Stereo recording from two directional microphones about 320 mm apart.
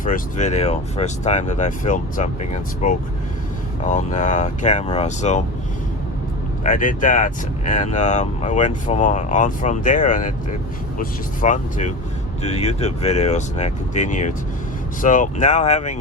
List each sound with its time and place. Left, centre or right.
0.0 s speech: left
6.7 s speech: left